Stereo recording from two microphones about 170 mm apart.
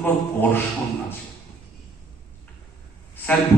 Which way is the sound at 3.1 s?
10° left (ahead or behind).